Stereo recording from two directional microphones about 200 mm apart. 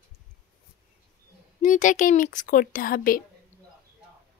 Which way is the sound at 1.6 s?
40° left (ahead or behind).